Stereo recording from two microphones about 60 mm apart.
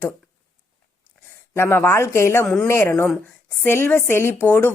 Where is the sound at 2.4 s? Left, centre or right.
Centre.